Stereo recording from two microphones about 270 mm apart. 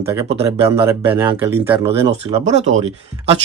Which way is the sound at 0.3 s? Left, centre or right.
Right.